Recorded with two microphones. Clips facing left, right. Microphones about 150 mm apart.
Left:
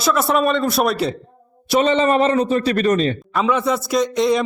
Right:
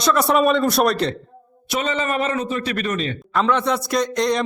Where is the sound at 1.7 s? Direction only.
30° left (ahead or behind).